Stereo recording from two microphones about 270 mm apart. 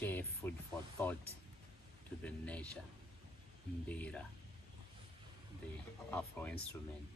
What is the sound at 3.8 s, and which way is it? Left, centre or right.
Speech, centre.